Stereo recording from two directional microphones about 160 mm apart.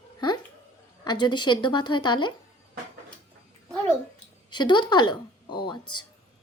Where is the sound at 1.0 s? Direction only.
30° left (ahead or behind).